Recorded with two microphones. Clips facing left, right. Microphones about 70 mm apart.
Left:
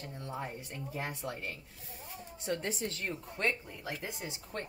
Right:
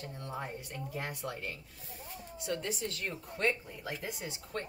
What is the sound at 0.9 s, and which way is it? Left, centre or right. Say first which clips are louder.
A woman's voice: left 1 dB; left.